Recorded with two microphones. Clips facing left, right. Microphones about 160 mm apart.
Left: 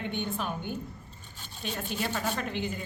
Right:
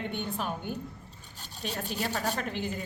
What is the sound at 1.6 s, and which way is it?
Speech, 40° right (ahead or behind).